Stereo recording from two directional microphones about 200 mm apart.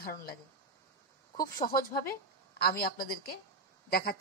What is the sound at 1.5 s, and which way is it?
A woman's voice, 45° left (ahead or behind).